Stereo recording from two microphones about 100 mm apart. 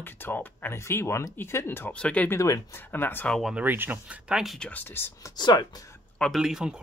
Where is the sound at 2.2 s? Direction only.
30° left (ahead or behind).